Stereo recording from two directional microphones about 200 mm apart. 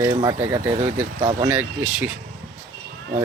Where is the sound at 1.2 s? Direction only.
25° right (ahead or behind).